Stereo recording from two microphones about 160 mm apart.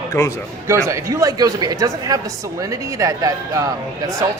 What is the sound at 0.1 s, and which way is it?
Speech, 20° left (ahead or behind).